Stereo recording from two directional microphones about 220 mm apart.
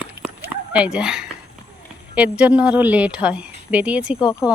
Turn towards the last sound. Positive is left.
turn(degrees=-5)  # may be behind; listen again after turning